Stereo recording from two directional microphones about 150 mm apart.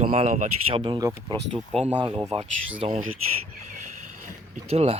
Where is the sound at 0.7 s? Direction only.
35° right (ahead or behind).